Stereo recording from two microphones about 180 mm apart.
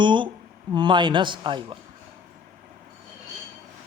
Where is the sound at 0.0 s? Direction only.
25° right (ahead or behind).